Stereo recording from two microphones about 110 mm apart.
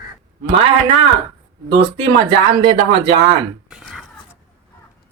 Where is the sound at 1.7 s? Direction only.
55° right (ahead or behind).